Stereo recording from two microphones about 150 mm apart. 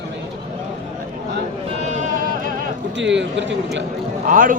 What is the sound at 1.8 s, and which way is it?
Sheep, 50° right (ahead or behind).